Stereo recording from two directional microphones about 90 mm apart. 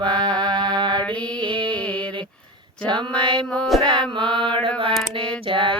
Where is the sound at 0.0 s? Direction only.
55° right (ahead or behind).